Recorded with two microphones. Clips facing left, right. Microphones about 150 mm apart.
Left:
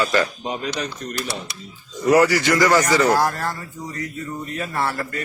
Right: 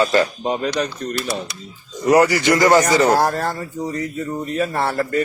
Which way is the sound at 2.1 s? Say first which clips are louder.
Right 2 dB; 20° right (ahead or behind).